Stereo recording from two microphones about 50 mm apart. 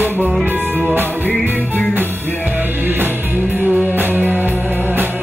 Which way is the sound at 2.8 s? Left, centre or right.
Right.